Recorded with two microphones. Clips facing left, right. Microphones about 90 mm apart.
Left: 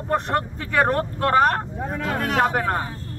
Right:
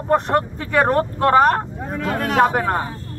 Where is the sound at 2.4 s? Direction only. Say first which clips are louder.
Right 5 dB; 20° right (ahead or behind).